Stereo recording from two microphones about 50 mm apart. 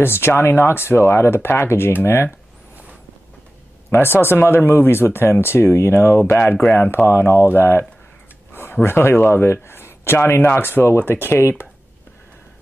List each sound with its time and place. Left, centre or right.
0.0 s speech: left
3.9 s speech: left
8.8 s speech: left